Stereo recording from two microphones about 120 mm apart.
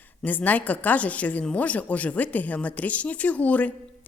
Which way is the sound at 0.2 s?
15° left (ahead or behind).